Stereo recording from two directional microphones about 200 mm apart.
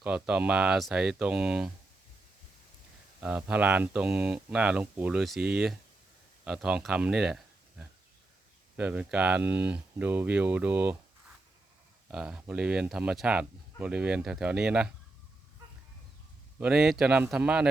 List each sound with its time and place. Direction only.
0.0 s speech: 5° right (ahead or behind)
3.2 s speech: 10° right (ahead or behind)
12.1 s speech: 5° right (ahead or behind)
16.6 s speech: 5° right (ahead or behind)